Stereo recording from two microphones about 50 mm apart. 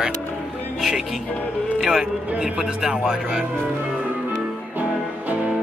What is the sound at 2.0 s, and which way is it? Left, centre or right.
Speech, right.